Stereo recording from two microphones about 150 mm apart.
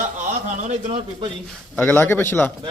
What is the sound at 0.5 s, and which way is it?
Speech, 55° right (ahead or behind).